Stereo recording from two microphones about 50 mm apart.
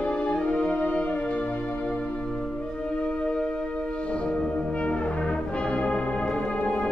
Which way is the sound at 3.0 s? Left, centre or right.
Centre.